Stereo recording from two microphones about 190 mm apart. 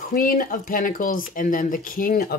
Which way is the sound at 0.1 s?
50° left (ahead or behind).